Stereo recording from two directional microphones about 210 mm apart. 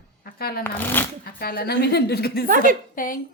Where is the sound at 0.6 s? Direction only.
10° left (ahead or behind).